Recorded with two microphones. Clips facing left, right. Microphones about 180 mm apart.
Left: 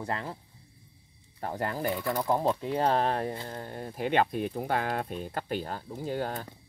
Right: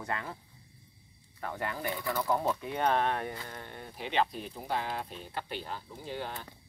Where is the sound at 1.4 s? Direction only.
35° left (ahead or behind).